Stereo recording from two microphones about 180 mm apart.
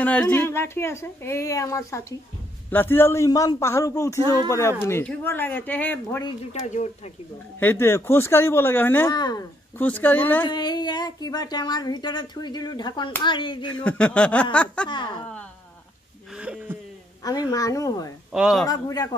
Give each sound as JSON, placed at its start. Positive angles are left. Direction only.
{"t": 0.0, "sound": "a woman's voice", "side_deg": 10}
{"t": 6.2, "sound": "speech", "side_deg": 35}
{"t": 7.6, "sound": "a woman's voice", "side_deg": 15}
{"t": 9.1, "sound": "speech", "side_deg": 20}
{"t": 9.8, "sound": "a woman's voice", "side_deg": 10}
{"t": 10.4, "sound": "speech", "side_deg": 25}
{"t": 13.8, "sound": "a woman's voice", "side_deg": 5}
{"t": 16.3, "sound": "a sound", "side_deg": -5}
{"t": 17.5, "sound": "speech", "side_deg": 20}
{"t": 18.3, "sound": "a man's voice", "side_deg": 0}
{"t": 18.7, "sound": "speech", "side_deg": 20}